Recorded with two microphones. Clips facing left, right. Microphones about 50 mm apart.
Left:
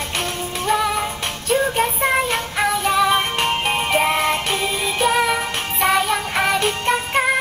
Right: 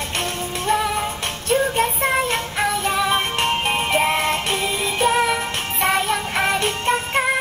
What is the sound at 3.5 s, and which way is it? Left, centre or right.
Music, centre.